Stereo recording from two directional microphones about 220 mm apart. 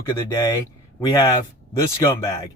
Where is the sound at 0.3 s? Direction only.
15° left (ahead or behind).